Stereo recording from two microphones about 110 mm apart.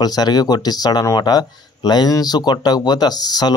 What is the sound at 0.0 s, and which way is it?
Speech, 40° left (ahead or behind).